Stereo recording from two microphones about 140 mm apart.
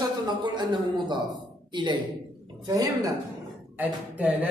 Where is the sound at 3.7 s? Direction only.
10° right (ahead or behind).